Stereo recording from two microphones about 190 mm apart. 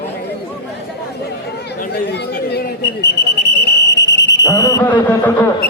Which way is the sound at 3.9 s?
65° left (ahead or behind).